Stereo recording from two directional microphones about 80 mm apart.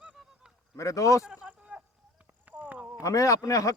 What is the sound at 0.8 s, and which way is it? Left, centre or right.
Speech, left.